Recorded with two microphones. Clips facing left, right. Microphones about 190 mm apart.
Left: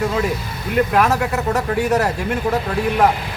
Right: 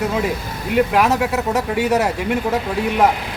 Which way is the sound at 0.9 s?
5° right (ahead or behind).